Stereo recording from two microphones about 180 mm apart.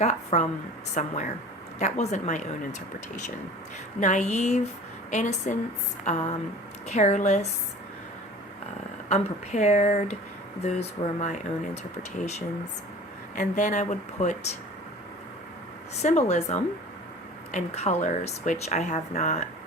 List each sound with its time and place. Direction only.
0.0 s speech: 40° left (ahead or behind)
4.0 s speech: 40° left (ahead or behind)
9.0 s speech: 40° left (ahead or behind)
13.3 s speech: 45° left (ahead or behind)
16.0 s speech: 40° left (ahead or behind)